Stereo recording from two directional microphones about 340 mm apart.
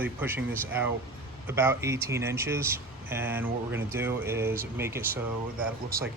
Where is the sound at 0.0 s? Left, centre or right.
Centre.